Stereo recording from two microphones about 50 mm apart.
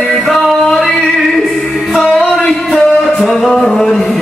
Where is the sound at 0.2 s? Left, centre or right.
Centre.